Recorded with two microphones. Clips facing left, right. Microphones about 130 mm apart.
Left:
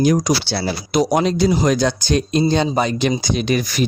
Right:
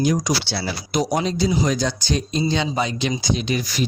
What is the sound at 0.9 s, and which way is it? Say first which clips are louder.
Speech: left 5 dB; 70° left (ahead or behind).